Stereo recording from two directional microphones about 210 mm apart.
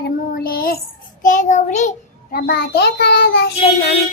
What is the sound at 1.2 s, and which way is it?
Speech, 35° left (ahead or behind).